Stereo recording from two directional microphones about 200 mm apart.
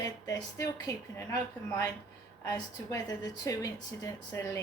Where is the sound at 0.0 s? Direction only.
15° left (ahead or behind).